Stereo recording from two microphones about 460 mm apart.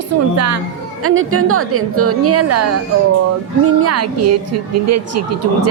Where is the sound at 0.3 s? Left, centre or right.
Right.